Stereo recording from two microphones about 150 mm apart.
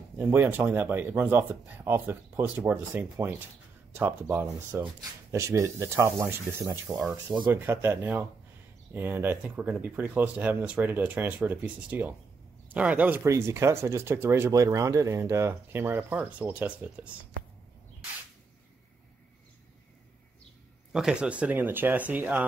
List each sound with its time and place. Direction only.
0.2 s speech: 15° right (ahead or behind)
20.9 s speech: 5° right (ahead or behind)